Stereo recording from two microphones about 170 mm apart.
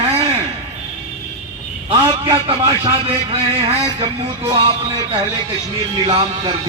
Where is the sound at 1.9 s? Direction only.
30° right (ahead or behind).